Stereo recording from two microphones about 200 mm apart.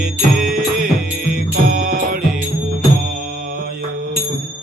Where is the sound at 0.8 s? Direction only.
45° right (ahead or behind).